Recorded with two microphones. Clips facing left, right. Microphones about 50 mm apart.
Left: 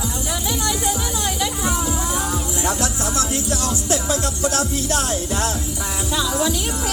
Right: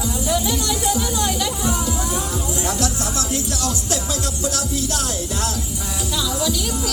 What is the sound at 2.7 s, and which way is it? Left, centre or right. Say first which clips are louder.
Music: left 2 dB; left.